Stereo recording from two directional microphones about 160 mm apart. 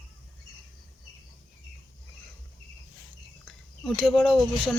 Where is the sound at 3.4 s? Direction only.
5° left (ahead or behind).